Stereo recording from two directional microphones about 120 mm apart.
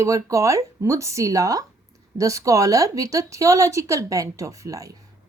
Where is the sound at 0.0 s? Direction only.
25° right (ahead or behind).